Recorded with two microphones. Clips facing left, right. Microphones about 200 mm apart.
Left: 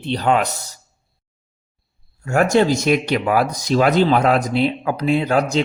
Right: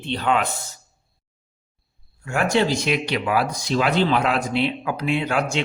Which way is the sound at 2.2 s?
40° left (ahead or behind).